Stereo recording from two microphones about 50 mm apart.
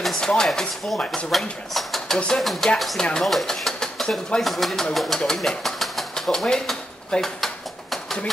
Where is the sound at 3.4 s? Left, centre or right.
Centre.